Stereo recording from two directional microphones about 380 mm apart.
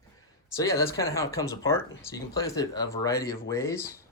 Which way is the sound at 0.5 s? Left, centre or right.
Centre.